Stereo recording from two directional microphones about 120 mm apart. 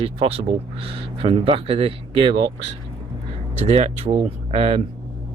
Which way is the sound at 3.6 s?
60° right (ahead or behind).